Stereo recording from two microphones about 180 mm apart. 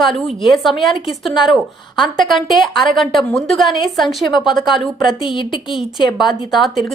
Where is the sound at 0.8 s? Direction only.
30° left (ahead or behind).